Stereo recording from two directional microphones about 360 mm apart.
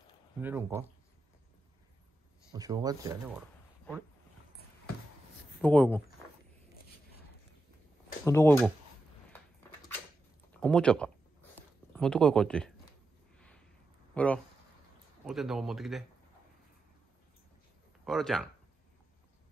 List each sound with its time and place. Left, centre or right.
0.4 s speech: centre
2.5 s speech: centre
5.6 s speech: centre
8.3 s speech: centre
10.5 s speech: centre
14.1 s speech: centre
18.0 s speech: centre